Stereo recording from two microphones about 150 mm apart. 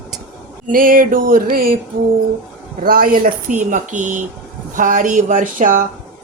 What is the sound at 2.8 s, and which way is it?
Speech, 75° right (ahead or behind).